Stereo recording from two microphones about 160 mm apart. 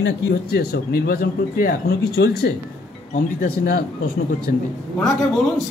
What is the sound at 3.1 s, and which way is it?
Speech, 70° left (ahead or behind).